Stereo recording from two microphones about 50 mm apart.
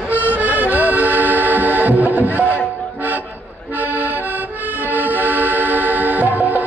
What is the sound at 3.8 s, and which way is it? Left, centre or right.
Accordion, right.